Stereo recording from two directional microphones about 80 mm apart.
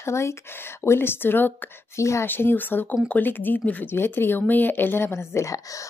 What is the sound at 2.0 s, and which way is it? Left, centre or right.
Speech, left.